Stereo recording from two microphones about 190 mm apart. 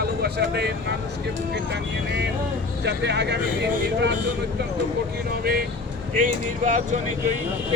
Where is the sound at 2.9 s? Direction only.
65° right (ahead or behind).